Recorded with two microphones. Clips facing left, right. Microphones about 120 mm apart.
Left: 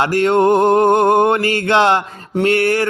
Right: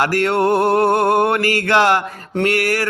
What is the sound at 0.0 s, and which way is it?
Mantra, 20° left (ahead or behind).